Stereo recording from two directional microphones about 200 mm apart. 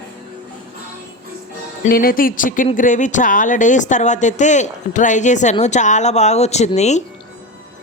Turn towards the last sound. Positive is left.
turn(degrees=35)  # may be behind; listen again after turning